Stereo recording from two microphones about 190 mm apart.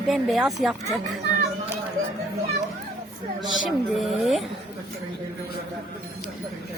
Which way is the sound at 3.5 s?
Centre (ahead or behind).